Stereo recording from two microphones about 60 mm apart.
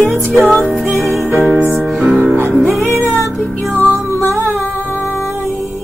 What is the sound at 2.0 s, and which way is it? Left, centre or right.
Music, right.